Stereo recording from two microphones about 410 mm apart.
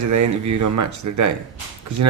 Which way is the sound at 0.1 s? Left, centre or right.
Right.